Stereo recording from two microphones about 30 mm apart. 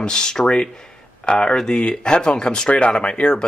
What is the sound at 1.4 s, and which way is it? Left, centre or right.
Speech, left.